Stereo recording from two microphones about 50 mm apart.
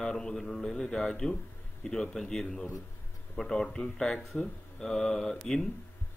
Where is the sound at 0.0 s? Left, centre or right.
Centre.